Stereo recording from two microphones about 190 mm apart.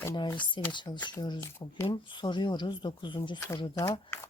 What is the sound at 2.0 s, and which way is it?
Speech, 25° left (ahead or behind).